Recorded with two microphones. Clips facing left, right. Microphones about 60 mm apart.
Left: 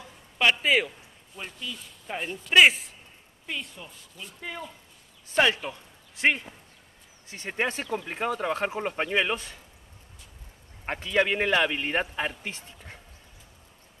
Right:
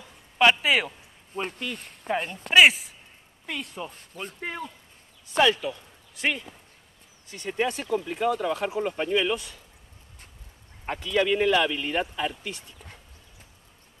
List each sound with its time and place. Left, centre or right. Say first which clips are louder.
0.4 s a man's voice: right 2 dB; centre
0.8 s speech: right 2 dB; right
2.5 s a man's voice: right 1 dB; centre
3.5 s speech: right 4 dB; right
5.3 s speech: right 2 dB; left
10.9 s speech: right 1 dB; left